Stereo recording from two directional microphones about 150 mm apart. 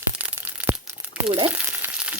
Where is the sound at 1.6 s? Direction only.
10° right (ahead or behind).